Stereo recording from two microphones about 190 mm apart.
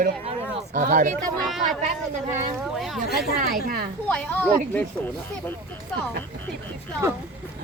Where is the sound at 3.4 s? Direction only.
50° right (ahead or behind).